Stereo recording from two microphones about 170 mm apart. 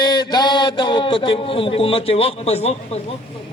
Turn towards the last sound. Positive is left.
turn(degrees=40)  # may be behind; listen again after turning